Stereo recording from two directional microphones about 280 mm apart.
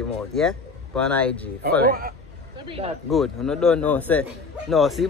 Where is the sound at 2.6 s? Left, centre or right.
Centre.